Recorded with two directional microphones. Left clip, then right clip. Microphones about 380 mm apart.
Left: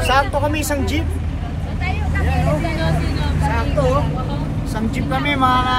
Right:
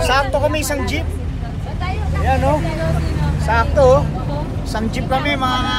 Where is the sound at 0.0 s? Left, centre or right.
Centre.